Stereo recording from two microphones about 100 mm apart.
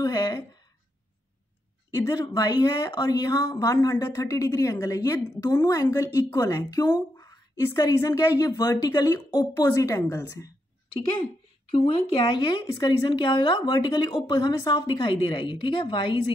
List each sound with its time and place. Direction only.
0.0 s a sound: 35° left (ahead or behind)
1.9 s a woman's voice: 30° left (ahead or behind)
11.7 s a woman's voice: 65° left (ahead or behind)
13.6 s a woman's voice: 45° left (ahead or behind)
15.1 s a woman's voice: 60° left (ahead or behind)